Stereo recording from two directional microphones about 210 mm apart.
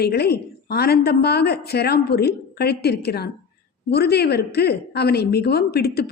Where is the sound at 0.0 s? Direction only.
50° left (ahead or behind).